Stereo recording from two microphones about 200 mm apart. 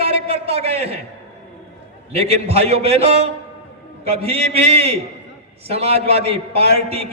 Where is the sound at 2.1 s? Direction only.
30° right (ahead or behind).